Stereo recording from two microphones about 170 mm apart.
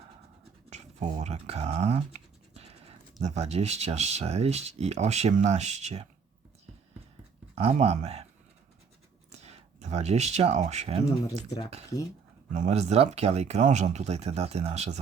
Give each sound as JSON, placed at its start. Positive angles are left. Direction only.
{"t": 0.7, "sound": "speech", "side_deg": -45}
{"t": 7.5, "sound": "speech", "side_deg": -35}
{"t": 9.3, "sound": "speech", "side_deg": -40}
{"t": 11.4, "sound": "speech", "side_deg": 20}
{"t": 12.5, "sound": "speech", "side_deg": -40}